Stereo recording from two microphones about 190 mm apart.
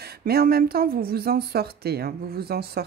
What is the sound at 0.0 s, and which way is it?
Speech, 55° right (ahead or behind).